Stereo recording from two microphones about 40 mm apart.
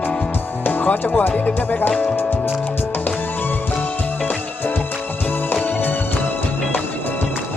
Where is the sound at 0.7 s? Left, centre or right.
Left.